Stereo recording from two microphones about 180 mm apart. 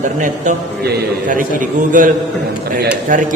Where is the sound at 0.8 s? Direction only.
50° right (ahead or behind).